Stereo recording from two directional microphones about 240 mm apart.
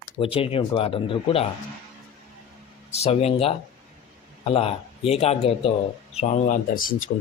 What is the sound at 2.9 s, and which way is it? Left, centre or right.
A man's voice, left.